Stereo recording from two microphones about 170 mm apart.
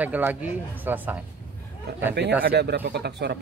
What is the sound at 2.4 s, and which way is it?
Speech, 75° right (ahead or behind).